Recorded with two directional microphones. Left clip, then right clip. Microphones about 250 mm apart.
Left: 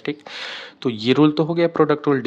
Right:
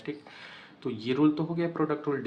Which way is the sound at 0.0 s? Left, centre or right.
Left.